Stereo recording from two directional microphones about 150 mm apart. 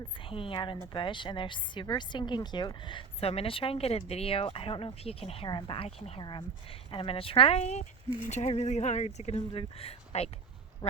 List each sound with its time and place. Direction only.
0.3 s a woman's voice: 35° left (ahead or behind)